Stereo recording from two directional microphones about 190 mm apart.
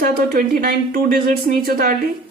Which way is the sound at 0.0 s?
50° right (ahead or behind).